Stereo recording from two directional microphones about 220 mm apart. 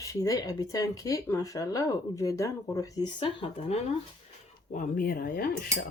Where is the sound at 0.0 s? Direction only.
15° left (ahead or behind).